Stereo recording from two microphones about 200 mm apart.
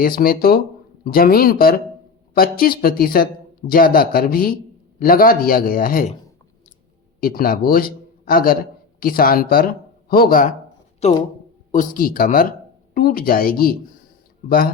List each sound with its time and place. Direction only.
0.0 s a man's voice: 45° left (ahead or behind)
7.2 s a man's voice: 45° left (ahead or behind)
11.0 s speech: 35° left (ahead or behind)
11.7 s speech: 45° left (ahead or behind)